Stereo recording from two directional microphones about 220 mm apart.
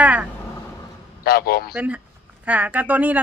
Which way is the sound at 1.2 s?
45° left (ahead or behind).